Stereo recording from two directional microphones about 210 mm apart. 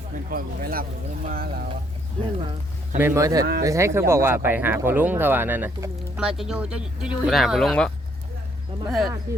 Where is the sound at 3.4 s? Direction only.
45° right (ahead or behind).